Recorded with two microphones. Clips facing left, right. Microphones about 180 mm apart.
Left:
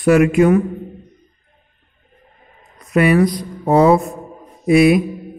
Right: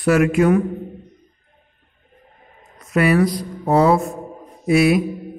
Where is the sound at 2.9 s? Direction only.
15° left (ahead or behind).